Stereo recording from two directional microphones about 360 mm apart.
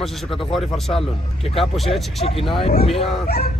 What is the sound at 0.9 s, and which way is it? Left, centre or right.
Speech, centre.